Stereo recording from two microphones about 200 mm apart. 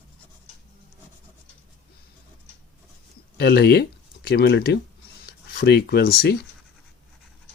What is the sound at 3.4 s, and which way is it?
Speech, 55° left (ahead or behind).